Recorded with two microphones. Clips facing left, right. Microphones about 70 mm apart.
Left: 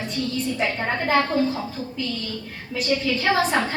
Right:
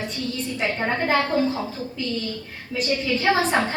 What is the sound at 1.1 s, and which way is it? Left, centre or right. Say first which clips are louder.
Speech: left 2 dB; right.